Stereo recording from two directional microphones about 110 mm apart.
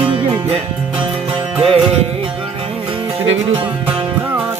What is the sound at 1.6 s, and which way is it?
Music, 60° right (ahead or behind).